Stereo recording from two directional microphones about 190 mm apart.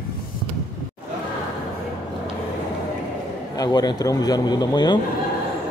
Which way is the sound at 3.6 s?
20° left (ahead or behind).